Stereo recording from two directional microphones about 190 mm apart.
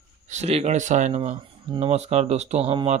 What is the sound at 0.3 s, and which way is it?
Mantra, 35° right (ahead or behind).